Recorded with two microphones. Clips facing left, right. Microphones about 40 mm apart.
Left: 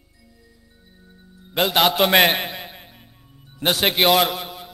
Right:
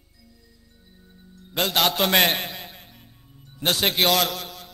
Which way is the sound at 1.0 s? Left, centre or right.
Left.